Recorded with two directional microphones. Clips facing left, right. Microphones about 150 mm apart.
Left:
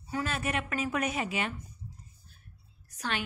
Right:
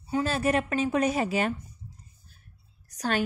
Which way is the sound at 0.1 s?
30° right (ahead or behind).